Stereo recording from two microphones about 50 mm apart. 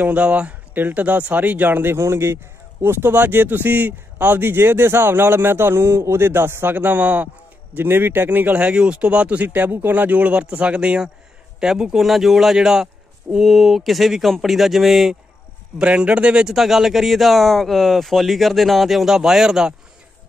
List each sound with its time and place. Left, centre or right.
0.0 s speech: right
2.0 s speech: right
7.7 s speech: right
8.7 s speech: centre
11.6 s a man's voice: centre
13.5 s speech: centre
15.8 s speech: right
16.4 s speech: centre